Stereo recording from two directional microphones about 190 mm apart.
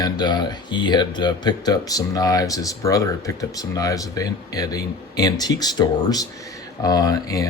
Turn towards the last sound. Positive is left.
turn(degrees=20)  # may be behind; listen again after turning